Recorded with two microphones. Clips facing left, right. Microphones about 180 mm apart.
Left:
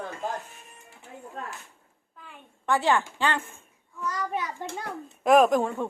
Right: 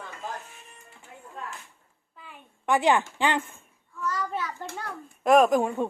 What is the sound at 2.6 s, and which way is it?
Speech, 15° right (ahead or behind).